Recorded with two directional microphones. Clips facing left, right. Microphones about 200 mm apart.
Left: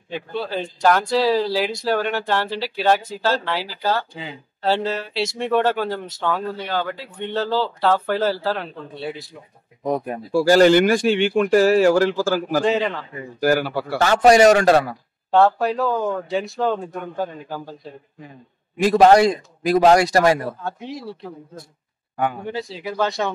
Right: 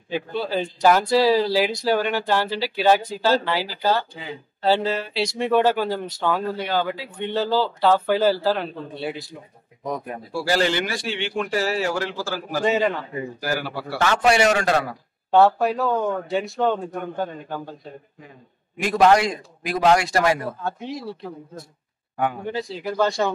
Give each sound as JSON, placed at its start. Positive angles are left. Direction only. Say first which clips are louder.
{"t": 0.1, "sound": "speech", "louder": "right 1 dB", "side_deg": 0}
{"t": 9.8, "sound": "speech", "louder": "left 6 dB", "side_deg": 30}
{"t": 10.3, "sound": "speech", "louder": "left 9 dB", "side_deg": 45}
{"t": 12.6, "sound": "speech", "louder": "even", "side_deg": 0}
{"t": 13.4, "sound": "a man's voice", "louder": "left 11 dB", "side_deg": 50}
{"t": 15.3, "sound": "speech", "louder": "even", "side_deg": 0}
{"t": 18.8, "sound": "a man's voice", "louder": "left 4 dB", "side_deg": 35}
{"t": 22.5, "sound": "speech", "louder": "right 1 dB", "side_deg": 0}